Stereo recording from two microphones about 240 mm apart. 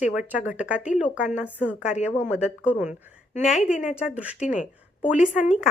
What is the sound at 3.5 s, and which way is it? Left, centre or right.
Speech, left.